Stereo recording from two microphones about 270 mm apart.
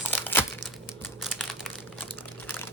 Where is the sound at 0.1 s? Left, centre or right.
Centre.